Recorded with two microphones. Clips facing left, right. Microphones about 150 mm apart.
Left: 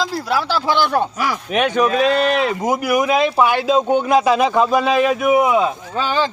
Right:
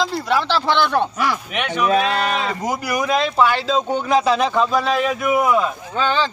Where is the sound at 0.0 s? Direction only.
5° left (ahead or behind).